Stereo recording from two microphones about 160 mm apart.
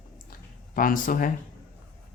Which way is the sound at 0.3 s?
60° left (ahead or behind).